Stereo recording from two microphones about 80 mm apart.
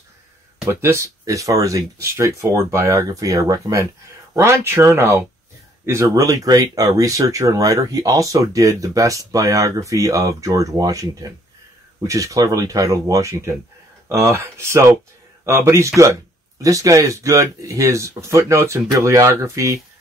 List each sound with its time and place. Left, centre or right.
0.7 s speech: right
4.4 s speech: right